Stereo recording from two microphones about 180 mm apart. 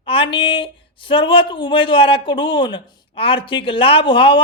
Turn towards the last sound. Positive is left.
turn(degrees=30)  # may be behind; listen again after turning